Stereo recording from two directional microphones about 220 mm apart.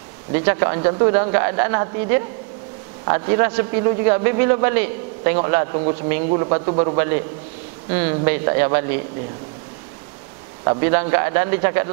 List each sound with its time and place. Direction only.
0.3 s a man's voice: 15° right (ahead or behind)
8.3 s a man's voice: 15° right (ahead or behind)
10.6 s a man's voice: 20° right (ahead or behind)